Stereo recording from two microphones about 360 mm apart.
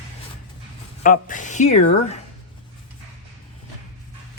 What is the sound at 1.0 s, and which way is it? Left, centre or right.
Speech, left.